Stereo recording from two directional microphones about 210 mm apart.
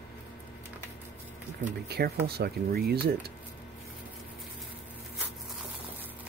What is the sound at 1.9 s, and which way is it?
Speech, 50° right (ahead or behind).